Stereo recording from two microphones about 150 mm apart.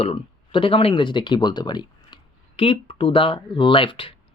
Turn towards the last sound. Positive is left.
turn(degrees=35)  # may be behind; listen again after turning